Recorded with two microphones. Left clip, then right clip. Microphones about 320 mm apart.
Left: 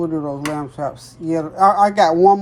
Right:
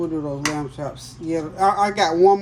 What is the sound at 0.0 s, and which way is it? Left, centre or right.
Speech, left.